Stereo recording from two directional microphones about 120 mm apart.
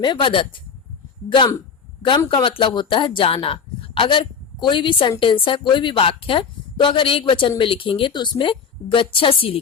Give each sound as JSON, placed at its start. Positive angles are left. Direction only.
{"t": 0.0, "sound": "speech", "side_deg": 40}
{"t": 2.0, "sound": "a woman's voice", "side_deg": 45}